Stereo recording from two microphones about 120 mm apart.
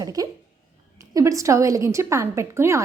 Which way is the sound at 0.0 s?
30° right (ahead or behind).